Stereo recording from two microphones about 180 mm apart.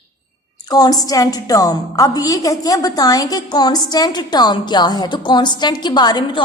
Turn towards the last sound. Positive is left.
turn(degrees=25)  # may be behind; listen again after turning